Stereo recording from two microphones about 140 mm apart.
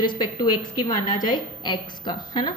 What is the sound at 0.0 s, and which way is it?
A woman's voice, 30° left (ahead or behind).